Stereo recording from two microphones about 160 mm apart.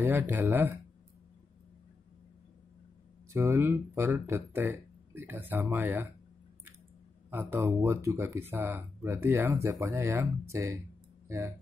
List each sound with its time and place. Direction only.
0.0 s speech: 15° right (ahead or behind)
3.3 s speech: 15° right (ahead or behind)
7.2 s speech: 15° right (ahead or behind)